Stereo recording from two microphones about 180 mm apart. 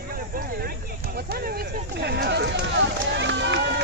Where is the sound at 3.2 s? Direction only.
85° right.